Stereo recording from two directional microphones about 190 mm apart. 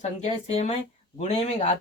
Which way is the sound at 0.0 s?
35° left (ahead or behind).